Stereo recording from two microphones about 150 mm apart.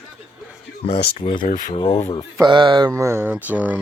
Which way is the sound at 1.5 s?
60° left (ahead or behind).